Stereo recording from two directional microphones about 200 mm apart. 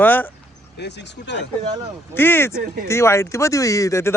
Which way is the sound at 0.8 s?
60° left (ahead or behind).